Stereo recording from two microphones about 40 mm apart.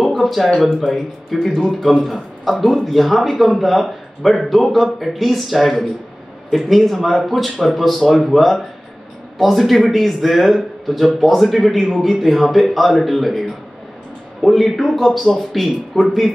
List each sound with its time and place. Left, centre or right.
0.0 s a sound: centre
0.5 s speech: centre
0.7 s a man's voice: centre